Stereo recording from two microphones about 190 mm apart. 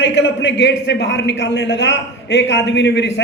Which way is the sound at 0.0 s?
65° left (ahead or behind).